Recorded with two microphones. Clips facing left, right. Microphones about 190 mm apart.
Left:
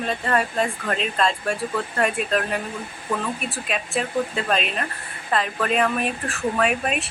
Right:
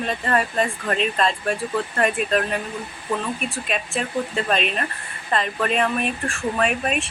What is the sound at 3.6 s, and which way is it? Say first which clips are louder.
Speech: left 2 dB; centre (ahead or behind).